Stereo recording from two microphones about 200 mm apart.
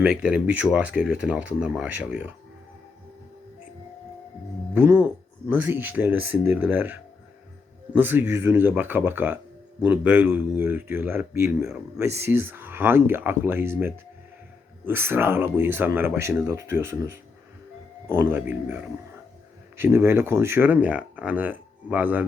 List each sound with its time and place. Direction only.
0.0 s speech: 5° right (ahead or behind)
4.7 s speech: 10° right (ahead or behind)